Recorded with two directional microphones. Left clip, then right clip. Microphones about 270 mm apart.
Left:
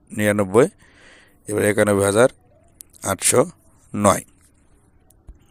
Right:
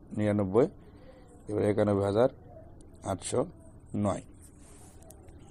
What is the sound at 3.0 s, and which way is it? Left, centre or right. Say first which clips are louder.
A man's voice: left 13 dB; left.